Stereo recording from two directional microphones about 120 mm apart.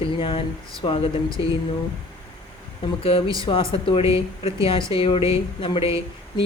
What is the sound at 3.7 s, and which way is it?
A woman's voice, 50° left (ahead or behind).